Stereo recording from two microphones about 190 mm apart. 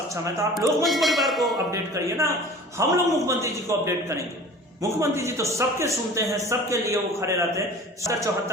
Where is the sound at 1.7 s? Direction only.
15° right (ahead or behind).